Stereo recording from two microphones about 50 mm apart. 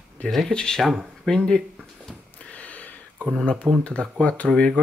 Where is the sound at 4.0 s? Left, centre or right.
Left.